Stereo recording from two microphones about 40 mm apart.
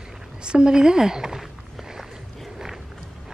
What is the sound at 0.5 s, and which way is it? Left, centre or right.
Speech, right.